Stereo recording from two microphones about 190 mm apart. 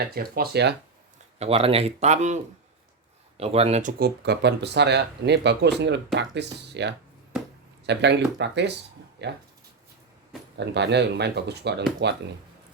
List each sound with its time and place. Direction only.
0.0 s speech: 50° right (ahead or behind)
1.4 s speech: 30° right (ahead or behind)
3.9 s speech: 55° right (ahead or behind)
10.6 s speech: 65° right (ahead or behind)